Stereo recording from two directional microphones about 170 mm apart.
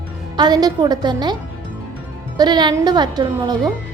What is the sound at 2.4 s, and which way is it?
A woman's voice, 25° right (ahead or behind).